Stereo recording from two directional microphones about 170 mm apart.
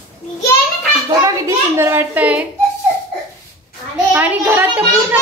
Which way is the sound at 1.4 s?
15° right (ahead or behind).